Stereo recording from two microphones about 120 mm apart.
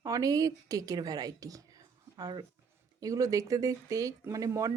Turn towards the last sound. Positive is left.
turn(degrees=-30)  # may be behind; listen again after turning